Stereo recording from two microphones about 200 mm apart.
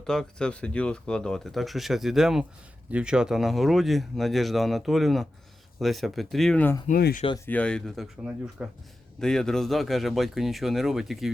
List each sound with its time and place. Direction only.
0.0 s speech: 5° left (ahead or behind)
6.8 s speech: 45° left (ahead or behind)
7.3 s speech: 15° left (ahead or behind)